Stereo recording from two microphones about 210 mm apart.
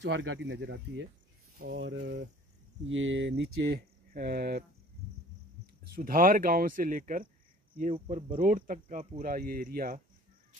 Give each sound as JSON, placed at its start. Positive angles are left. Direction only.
{"t": 0.0, "sound": "speech", "side_deg": -55}
{"t": 5.9, "sound": "speech", "side_deg": -40}